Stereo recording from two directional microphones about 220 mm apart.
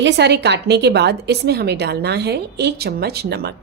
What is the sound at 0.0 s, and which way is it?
A woman's voice, 50° right (ahead or behind).